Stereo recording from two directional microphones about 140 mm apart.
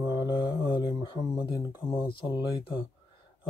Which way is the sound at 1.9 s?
25° left (ahead or behind).